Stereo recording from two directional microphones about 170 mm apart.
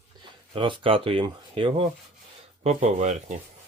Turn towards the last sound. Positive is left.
turn(degrees=-40)  # may be behind; listen again after turning